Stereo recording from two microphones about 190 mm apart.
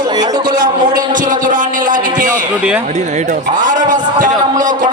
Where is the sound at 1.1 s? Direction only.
45° right (ahead or behind).